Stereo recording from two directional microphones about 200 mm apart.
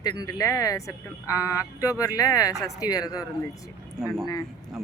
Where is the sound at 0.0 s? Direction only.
20° left (ahead or behind).